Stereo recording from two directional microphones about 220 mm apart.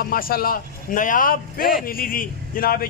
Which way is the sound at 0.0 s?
40° left (ahead or behind).